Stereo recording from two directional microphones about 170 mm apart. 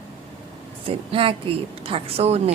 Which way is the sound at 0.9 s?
30° right (ahead or behind).